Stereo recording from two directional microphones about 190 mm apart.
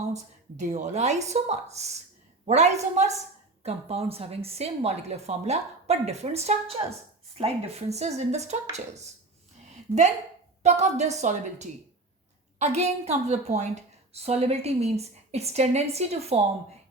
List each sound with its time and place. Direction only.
0.1 s a woman's voice: 40° right (ahead or behind)
10.6 s a woman's voice: 35° right (ahead or behind)